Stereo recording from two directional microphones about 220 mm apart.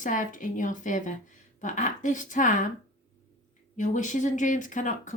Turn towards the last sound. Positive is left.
turn(degrees=35)  # may be behind; listen again after turning